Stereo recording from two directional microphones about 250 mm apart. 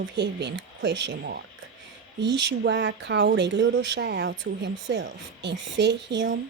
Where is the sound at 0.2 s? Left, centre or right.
Right.